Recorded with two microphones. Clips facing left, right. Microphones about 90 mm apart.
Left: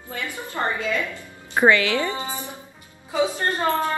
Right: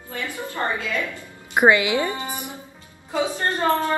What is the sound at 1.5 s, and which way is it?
Speech, 15° right (ahead or behind).